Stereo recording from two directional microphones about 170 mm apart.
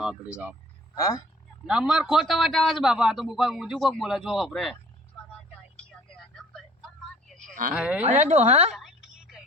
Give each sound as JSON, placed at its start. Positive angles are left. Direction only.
{"t": 0.9, "sound": "speech", "side_deg": 20}
{"t": 1.6, "sound": "a man's voice", "side_deg": -5}
{"t": 6.3, "sound": "a sound", "side_deg": 0}
{"t": 7.7, "sound": "speech", "side_deg": -5}
{"t": 8.0, "sound": "speech", "side_deg": -45}
{"t": 8.7, "sound": "a sound", "side_deg": 0}